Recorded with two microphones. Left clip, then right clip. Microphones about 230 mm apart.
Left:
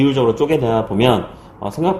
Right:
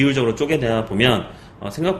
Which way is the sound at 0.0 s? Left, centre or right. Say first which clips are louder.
Left 4 dB; centre.